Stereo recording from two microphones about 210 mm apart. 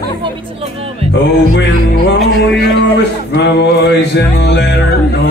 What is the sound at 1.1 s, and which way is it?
Music, 55° left (ahead or behind).